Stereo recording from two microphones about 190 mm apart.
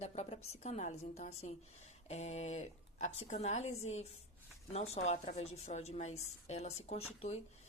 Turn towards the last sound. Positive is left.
turn(degrees=35)  # may be behind; listen again after turning